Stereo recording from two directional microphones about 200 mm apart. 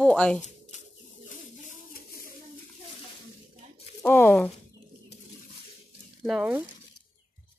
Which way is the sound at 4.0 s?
10° left (ahead or behind).